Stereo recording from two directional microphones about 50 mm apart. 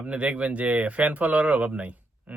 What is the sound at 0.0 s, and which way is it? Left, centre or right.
Speech, right.